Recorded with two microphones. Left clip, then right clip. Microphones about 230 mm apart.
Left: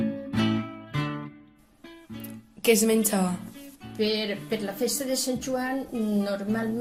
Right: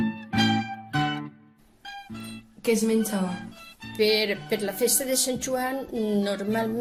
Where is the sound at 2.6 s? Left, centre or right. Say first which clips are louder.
Left 2 dB; left.